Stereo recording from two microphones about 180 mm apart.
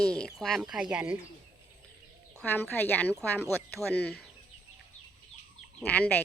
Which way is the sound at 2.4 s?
10° left (ahead or behind).